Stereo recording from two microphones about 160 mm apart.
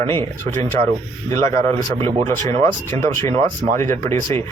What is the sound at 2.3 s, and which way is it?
Speech, 15° left (ahead or behind).